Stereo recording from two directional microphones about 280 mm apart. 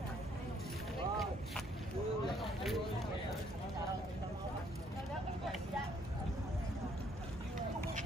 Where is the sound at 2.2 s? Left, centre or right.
Centre.